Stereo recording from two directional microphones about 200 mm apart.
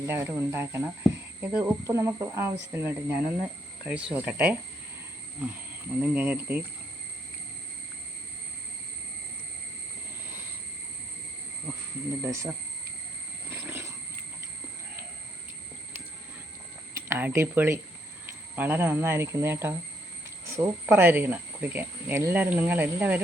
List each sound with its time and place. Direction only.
0.1 s speech: 15° right (ahead or behind)
6.0 s speech: 10° right (ahead or behind)
12.2 s speech: 10° right (ahead or behind)
13.5 s wild animals: 10° right (ahead or behind)
16.9 s speech: 10° right (ahead or behind)